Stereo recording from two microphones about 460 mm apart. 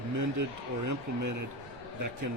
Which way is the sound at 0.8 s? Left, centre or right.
Right.